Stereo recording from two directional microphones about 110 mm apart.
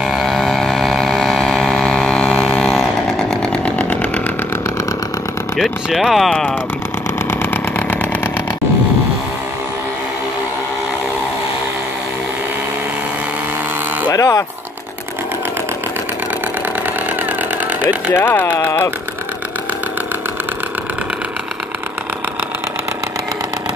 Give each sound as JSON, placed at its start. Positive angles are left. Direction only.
{"t": 0.0, "sound": "a sound", "side_deg": 0}
{"t": 5.6, "sound": "speech", "side_deg": 0}
{"t": 7.2, "sound": "engine", "side_deg": 15}
{"t": 14.1, "sound": "speech", "side_deg": 30}
{"t": 18.1, "sound": "speech", "side_deg": 20}